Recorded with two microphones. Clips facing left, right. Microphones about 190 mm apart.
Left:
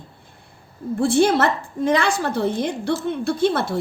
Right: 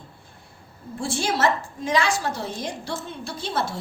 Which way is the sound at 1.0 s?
60° left (ahead or behind).